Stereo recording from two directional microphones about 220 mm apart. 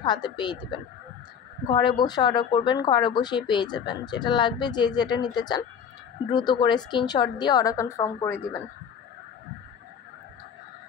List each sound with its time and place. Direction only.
0.0 s a woman's voice: 20° left (ahead or behind)